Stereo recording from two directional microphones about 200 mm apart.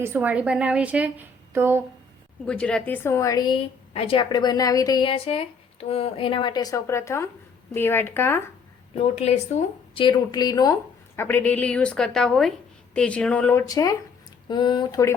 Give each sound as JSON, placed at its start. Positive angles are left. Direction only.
{"t": 0.0, "sound": "a woman's voice", "side_deg": -10}
{"t": 2.5, "sound": "a woman's voice", "side_deg": 5}
{"t": 9.0, "sound": "a woman's voice", "side_deg": 30}
{"t": 11.2, "sound": "a woman's voice", "side_deg": 10}